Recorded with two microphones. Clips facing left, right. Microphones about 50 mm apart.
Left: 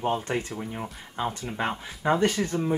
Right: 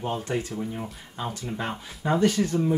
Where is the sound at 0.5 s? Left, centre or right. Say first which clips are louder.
Right 2 dB; centre.